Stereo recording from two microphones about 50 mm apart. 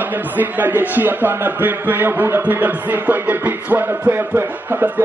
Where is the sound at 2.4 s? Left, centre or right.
Right.